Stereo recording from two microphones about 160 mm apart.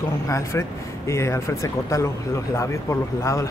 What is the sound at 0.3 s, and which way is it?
Speech, 15° left (ahead or behind).